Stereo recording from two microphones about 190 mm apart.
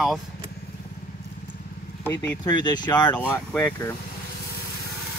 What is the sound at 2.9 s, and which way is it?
Speech, 10° left (ahead or behind).